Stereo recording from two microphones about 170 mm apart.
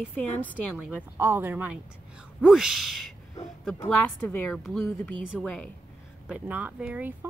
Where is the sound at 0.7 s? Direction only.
5° right (ahead or behind).